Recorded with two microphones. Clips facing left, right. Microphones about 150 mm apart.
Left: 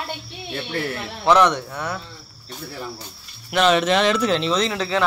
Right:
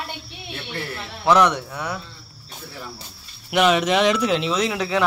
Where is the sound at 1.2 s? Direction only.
10° right (ahead or behind).